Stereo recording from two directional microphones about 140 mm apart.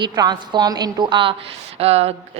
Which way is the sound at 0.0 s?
30° right (ahead or behind).